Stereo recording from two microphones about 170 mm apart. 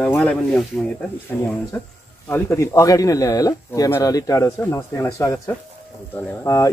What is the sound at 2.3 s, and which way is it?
Speech, 15° left (ahead or behind).